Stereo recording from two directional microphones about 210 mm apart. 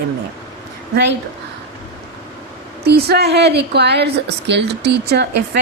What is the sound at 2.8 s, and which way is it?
A woman's voice, 50° right (ahead or behind).